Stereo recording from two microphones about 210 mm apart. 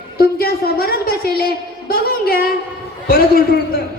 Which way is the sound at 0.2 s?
45° left (ahead or behind).